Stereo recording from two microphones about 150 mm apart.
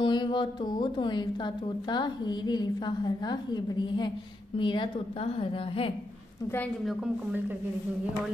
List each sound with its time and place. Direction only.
0.0 s a woman's voice: 30° left (ahead or behind)